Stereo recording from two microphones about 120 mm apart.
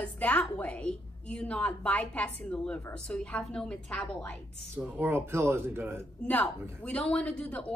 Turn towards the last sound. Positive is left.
turn(degrees=10)  # may be behind; listen again after turning